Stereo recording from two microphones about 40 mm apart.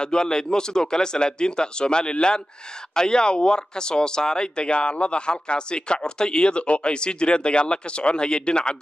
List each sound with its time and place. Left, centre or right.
0.0 s speech: left